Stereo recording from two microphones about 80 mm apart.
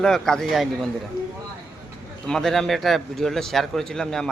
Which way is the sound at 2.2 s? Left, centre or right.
Centre.